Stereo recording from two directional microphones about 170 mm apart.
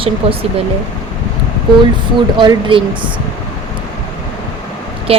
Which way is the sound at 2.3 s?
30° right (ahead or behind).